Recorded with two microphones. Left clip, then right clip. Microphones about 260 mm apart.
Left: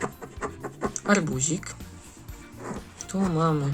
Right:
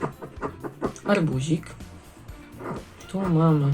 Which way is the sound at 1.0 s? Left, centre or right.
Centre.